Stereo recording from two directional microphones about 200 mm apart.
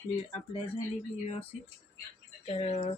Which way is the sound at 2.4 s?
30° left (ahead or behind).